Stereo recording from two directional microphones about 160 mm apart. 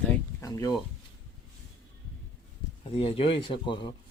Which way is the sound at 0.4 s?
20° left (ahead or behind).